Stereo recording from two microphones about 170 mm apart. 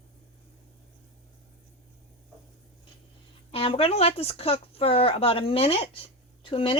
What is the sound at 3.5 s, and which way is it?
Speech, 35° left (ahead or behind).